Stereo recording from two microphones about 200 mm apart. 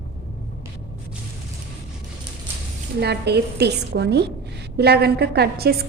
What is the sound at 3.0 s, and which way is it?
A woman's voice, 55° right (ahead or behind).